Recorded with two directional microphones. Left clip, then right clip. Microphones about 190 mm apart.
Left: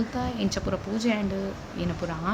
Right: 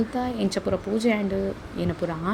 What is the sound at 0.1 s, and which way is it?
Speech, 15° right (ahead or behind).